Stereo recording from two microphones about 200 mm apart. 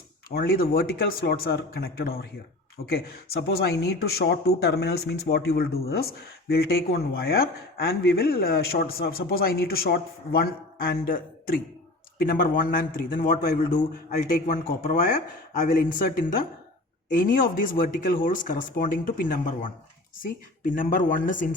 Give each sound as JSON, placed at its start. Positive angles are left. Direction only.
{"t": 0.3, "sound": "speech", "side_deg": 50}